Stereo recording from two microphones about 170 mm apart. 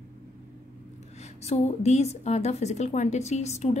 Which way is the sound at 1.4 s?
40° left (ahead or behind).